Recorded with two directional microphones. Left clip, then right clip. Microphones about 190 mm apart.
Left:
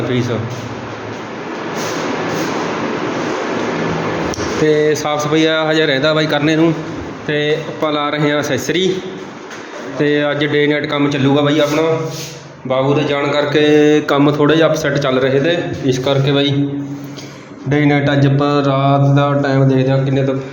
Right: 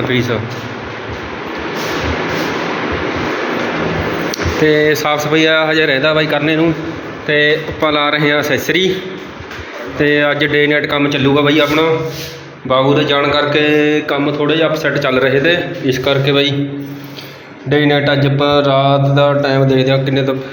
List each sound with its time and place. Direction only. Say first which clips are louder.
0.1 s a man's voice: right 3 dB; 5° left (ahead or behind)
4.3 s mantra: right 2 dB; 5° left (ahead or behind)
10.0 s mantra: right 3 dB; 5° left (ahead or behind)
12.6 s a man's voice: right 3 dB; 5° left (ahead or behind)
13.5 s speech: left 1 dB; 20° left (ahead or behind)
17.7 s mantra: right 2 dB; 10° left (ahead or behind)